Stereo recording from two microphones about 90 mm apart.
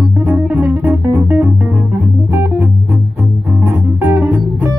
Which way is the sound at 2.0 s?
15° right (ahead or behind).